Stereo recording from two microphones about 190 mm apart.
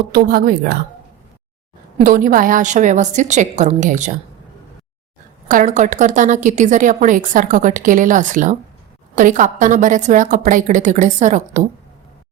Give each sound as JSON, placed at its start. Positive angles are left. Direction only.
{"t": 0.1, "sound": "a woman's voice", "side_deg": -50}
{"t": 2.0, "sound": "a woman's voice", "side_deg": -45}
{"t": 5.5, "sound": "a woman's voice", "side_deg": -45}